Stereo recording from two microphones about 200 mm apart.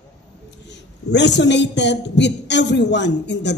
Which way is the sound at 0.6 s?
60° left (ahead or behind).